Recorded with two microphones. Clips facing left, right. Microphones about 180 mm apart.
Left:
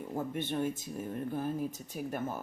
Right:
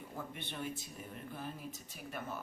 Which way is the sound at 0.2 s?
45° left (ahead or behind).